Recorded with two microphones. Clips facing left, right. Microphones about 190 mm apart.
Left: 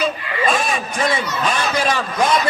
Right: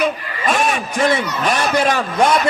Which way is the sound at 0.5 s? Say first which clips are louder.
Right 3 dB; 75° right (ahead or behind).